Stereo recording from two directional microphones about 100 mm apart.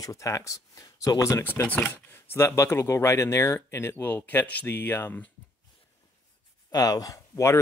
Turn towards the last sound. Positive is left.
turn(degrees=35)  # may be behind; listen again after turning